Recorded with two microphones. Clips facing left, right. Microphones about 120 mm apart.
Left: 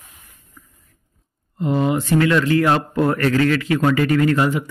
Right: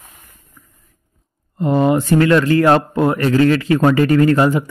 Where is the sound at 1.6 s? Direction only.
45° right (ahead or behind).